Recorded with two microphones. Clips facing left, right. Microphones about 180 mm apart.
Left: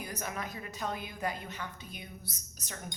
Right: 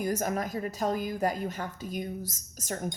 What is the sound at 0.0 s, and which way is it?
A woman's voice, 45° right (ahead or behind).